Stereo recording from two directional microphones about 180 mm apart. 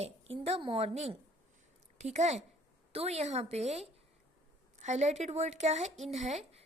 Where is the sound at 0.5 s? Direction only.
30° right (ahead or behind).